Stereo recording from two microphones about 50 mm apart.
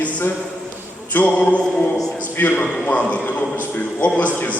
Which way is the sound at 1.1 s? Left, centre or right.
Left.